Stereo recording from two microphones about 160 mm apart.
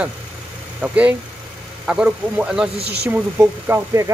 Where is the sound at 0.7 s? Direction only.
10° right (ahead or behind).